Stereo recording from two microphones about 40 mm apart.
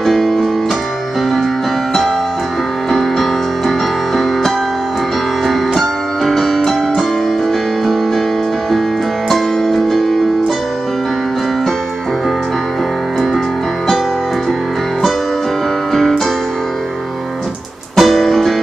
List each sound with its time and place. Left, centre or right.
0.0 s music: centre
2.9 s music: centre
5.5 s music: centre
9.3 s music: centre
15.9 s music: centre
17.9 s music: centre